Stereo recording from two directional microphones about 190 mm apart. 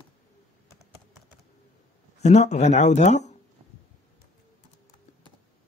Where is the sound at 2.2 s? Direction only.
35° left (ahead or behind).